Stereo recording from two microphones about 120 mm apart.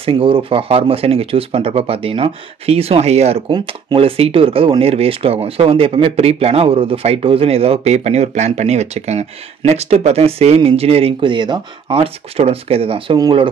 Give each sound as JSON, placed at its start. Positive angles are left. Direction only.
{"t": 0.0, "sound": "speech", "side_deg": -50}
{"t": 3.4, "sound": "speech", "side_deg": -45}
{"t": 11.9, "sound": "speech", "side_deg": -55}